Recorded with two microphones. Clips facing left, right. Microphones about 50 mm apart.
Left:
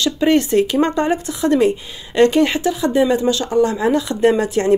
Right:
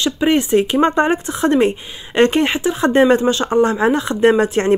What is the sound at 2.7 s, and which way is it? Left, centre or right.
Speech, right.